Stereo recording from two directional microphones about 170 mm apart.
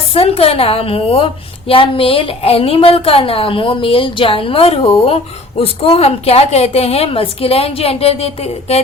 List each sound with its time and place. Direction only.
0.1 s a woman's voice: 35° left (ahead or behind)